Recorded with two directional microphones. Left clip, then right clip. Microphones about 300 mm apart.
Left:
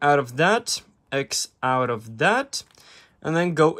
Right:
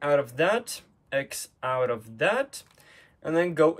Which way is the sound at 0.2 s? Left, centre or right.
Centre.